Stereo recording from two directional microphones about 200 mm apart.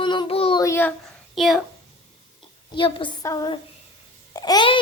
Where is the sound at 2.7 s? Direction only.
25° left (ahead or behind).